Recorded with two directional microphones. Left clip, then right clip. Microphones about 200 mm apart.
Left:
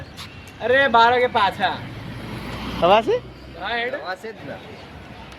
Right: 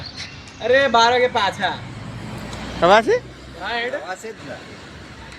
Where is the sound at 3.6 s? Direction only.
Centre (ahead or behind).